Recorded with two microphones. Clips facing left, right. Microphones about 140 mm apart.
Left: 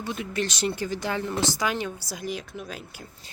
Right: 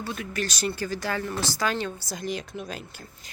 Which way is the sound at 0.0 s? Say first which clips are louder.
Left 2 dB; 20° left (ahead or behind).